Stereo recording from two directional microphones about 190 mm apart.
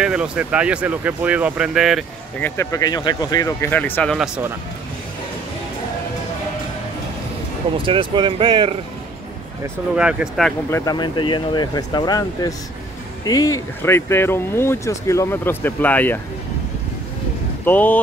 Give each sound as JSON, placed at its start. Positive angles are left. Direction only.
{"t": 0.0, "sound": "speech", "side_deg": -5}
{"t": 2.4, "sound": "speech", "side_deg": 15}
{"t": 7.7, "sound": "speech", "side_deg": -25}
{"t": 9.9, "sound": "speech", "side_deg": -5}
{"t": 10.7, "sound": "speech", "side_deg": 20}
{"t": 17.6, "sound": "speech", "side_deg": 10}